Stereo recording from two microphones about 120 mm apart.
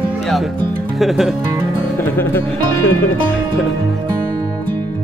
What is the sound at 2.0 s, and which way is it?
Speech, 20° left (ahead or behind).